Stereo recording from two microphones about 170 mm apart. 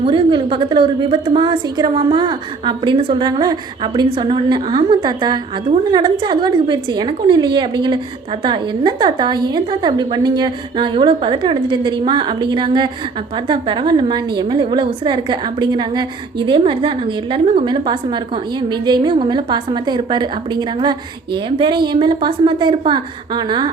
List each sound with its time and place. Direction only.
0.0 s a woman's voice: 30° right (ahead or behind)